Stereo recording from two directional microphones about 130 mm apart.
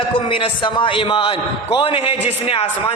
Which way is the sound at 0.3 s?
40° left (ahead or behind).